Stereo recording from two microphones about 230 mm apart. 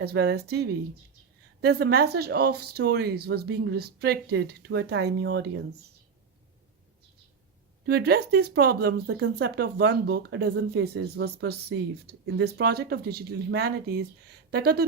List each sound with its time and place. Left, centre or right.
0.0 s speech: right
7.9 s speech: right